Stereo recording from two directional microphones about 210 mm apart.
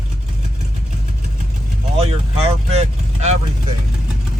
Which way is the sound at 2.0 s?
30° right (ahead or behind).